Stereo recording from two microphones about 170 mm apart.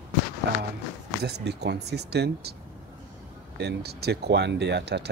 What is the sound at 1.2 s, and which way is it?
Speech, 80° right.